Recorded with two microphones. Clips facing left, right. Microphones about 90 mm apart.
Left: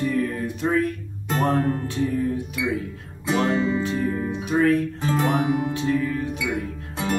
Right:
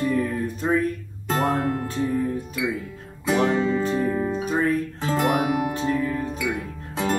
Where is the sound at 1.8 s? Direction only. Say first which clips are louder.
Left 1 dB; 40° right (ahead or behind).